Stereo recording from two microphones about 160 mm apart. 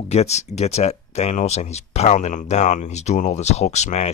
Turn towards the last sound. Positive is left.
turn(degrees=45)  # may be behind; listen again after turning